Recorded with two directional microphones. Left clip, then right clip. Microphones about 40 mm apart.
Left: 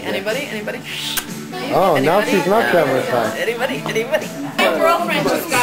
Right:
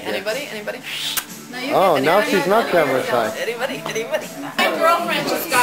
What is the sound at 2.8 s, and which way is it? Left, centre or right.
Speech, right.